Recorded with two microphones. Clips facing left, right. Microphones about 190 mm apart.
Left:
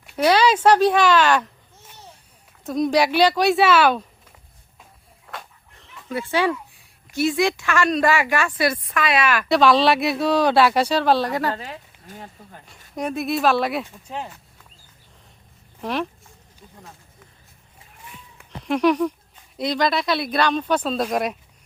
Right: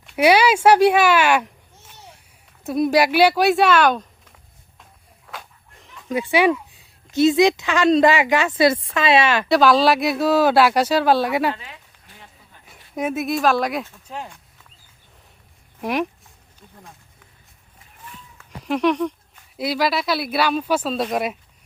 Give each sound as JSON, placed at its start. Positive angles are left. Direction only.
{"t": 0.2, "sound": "a woman's voice", "side_deg": -10}
{"t": 2.6, "sound": "speech", "side_deg": -5}
{"t": 4.8, "sound": "walk", "side_deg": 0}
{"t": 6.1, "sound": "speech", "side_deg": -15}
{"t": 9.5, "sound": "speech", "side_deg": 0}
{"t": 11.5, "sound": "a sound", "side_deg": 40}
{"t": 13.0, "sound": "speech", "side_deg": 0}
{"t": 15.8, "sound": "a woman's voice", "side_deg": -10}
{"t": 18.7, "sound": "speech", "side_deg": 0}